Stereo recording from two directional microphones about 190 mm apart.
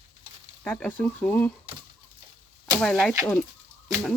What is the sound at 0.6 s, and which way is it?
Speech, 5° left (ahead or behind).